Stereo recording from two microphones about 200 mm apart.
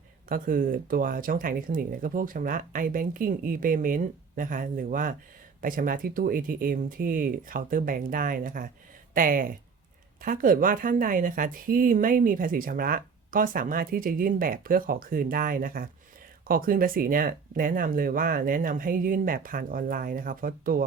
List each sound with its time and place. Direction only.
0.3 s a woman's voice: 45° right (ahead or behind)